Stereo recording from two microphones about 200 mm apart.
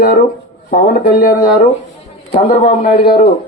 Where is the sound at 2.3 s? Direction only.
35° left (ahead or behind).